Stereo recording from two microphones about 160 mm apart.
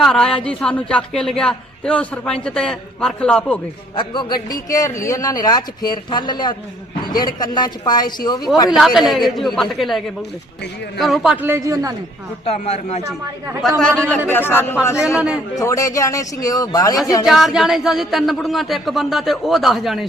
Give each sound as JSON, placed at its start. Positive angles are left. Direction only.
{"t": 0.0, "sound": "speech", "side_deg": 5}
{"t": 3.9, "sound": "a man's voice", "side_deg": 30}
{"t": 8.7, "sound": "speech", "side_deg": 0}
{"t": 11.4, "sound": "speech", "side_deg": -15}
{"t": 12.5, "sound": "a man's voice", "side_deg": 45}
{"t": 13.6, "sound": "speech", "side_deg": 0}
{"t": 14.3, "sound": "a man's voice", "side_deg": 15}
{"t": 14.9, "sound": "a man's voice", "side_deg": -5}
{"t": 15.5, "sound": "a man's voice", "side_deg": 20}
{"t": 17.2, "sound": "speech", "side_deg": 0}